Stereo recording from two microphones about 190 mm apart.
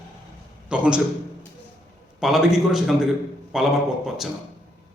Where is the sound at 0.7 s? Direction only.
5° right (ahead or behind).